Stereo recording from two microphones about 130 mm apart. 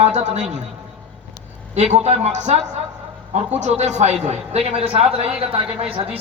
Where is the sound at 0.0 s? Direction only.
60° right (ahead or behind).